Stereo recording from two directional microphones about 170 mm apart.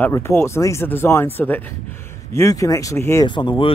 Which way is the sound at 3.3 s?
25° left (ahead or behind).